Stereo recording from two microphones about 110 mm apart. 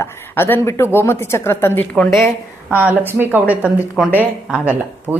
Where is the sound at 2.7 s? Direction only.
15° right (ahead or behind).